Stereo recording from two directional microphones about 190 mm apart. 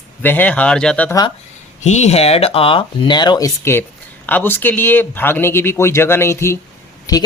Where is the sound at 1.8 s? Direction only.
35° left (ahead or behind).